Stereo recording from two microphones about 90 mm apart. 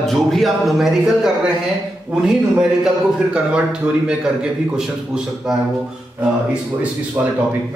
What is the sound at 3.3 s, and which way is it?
Speech, 10° right (ahead or behind).